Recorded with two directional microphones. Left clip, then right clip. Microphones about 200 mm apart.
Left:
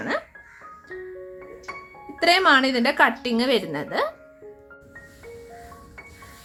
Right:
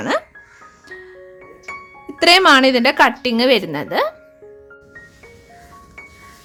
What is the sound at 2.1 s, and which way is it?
A woman's voice, 45° right (ahead or behind).